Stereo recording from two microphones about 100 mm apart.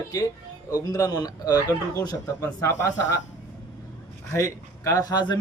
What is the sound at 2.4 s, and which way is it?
Speech, 30° left (ahead or behind).